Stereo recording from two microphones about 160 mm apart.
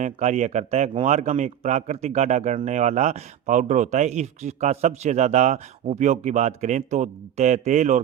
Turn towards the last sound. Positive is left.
turn(degrees=-45)  # may be behind; listen again after turning